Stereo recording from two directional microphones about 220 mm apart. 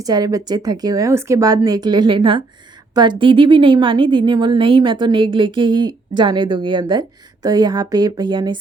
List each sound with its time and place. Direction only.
0.0 s a woman's voice: 15° right (ahead or behind)